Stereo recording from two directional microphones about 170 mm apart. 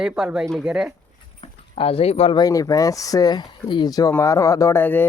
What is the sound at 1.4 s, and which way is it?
Speech, 35° left (ahead or behind).